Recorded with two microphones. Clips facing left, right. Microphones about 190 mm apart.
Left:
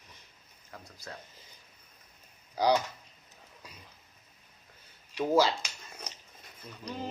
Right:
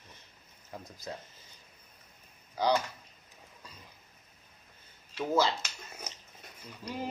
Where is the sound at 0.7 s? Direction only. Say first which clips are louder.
Right 4 dB; 20° right (ahead or behind).